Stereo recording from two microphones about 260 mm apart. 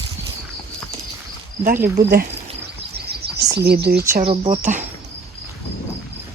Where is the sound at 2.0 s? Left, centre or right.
Right.